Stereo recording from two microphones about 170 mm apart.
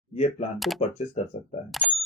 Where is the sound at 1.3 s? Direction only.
45° left (ahead or behind).